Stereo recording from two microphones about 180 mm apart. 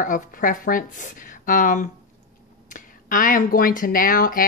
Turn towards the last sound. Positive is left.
turn(degrees=50)  # may be behind; listen again after turning